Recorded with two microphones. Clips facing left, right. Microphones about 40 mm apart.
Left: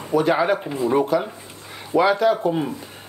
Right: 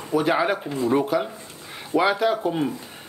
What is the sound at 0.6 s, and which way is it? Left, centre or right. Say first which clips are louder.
Speech: left 2 dB; centre.